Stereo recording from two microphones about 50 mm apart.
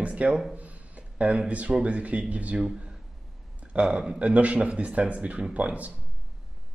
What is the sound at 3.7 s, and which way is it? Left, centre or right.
Speech, right.